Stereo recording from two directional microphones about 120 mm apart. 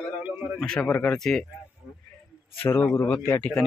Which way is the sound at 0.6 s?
5° left (ahead or behind).